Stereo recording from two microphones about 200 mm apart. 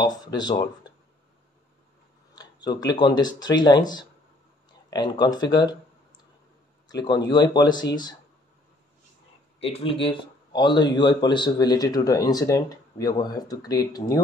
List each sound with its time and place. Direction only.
0.0 s speech: 20° left (ahead or behind)
2.3 s speech: 20° left (ahead or behind)
5.6 s a sound: 20° left (ahead or behind)
6.9 s speech: 20° left (ahead or behind)
9.6 s speech: 30° left (ahead or behind)